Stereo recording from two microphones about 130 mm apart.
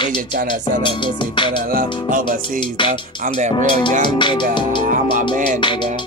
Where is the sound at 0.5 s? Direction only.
35° left (ahead or behind).